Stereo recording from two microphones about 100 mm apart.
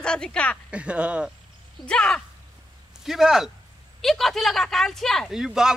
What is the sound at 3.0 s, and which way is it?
Speech, 5° right (ahead or behind).